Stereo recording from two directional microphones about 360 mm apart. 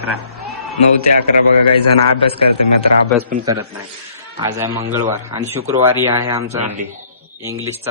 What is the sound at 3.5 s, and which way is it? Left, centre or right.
A man's voice, centre.